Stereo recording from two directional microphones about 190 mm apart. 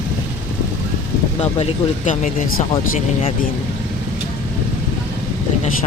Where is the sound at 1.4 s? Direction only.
35° left (ahead or behind).